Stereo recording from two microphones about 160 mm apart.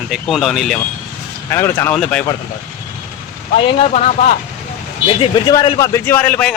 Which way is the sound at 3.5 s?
40° left (ahead or behind).